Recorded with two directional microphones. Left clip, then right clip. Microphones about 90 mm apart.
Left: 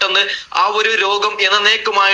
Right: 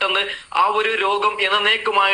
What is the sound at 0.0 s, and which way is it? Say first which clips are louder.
A man's voice: left 5 dB; 35° left (ahead or behind).